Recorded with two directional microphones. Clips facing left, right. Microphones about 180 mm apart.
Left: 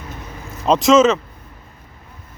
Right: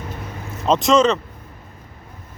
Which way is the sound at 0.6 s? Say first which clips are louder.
Left 3 dB; centre (ahead or behind).